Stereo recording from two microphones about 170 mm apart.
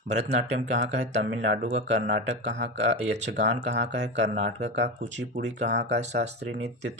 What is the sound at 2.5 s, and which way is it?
Speech, 90° right.